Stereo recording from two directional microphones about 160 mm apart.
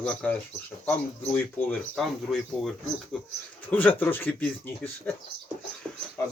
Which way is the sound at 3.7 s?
10° left (ahead or behind).